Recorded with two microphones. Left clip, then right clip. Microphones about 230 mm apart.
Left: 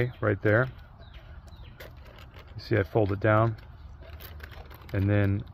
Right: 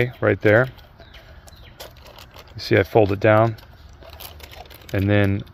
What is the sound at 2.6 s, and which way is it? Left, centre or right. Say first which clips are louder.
Speech: right 10 dB; right.